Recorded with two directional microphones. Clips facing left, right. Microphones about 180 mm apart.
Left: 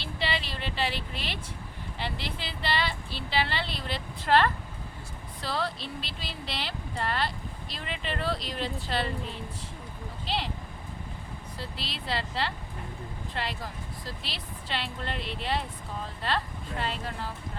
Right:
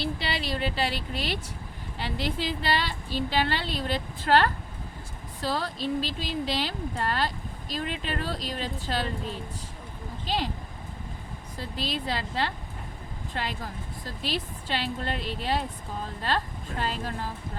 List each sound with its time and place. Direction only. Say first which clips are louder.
0.0 s a woman's voice: right 2 dB; 40° right (ahead or behind)
5.4 s speech: right 3 dB; 40° right (ahead or behind)
10.2 s speech: right 3 dB; 45° right (ahead or behind)
11.5 s a woman's voice: right 8 dB; 45° right (ahead or behind)
16.8 s a woman's voice: right 3 dB; 40° right (ahead or behind)